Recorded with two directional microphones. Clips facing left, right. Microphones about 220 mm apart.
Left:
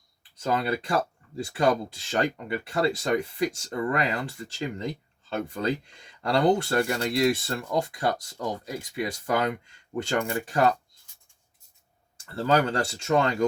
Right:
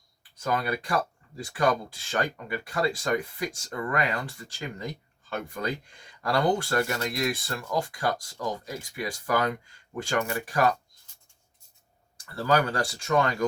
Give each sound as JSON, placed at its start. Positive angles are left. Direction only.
{"t": 0.2, "sound": "speech", "side_deg": 25}
{"t": 12.3, "sound": "speech", "side_deg": 25}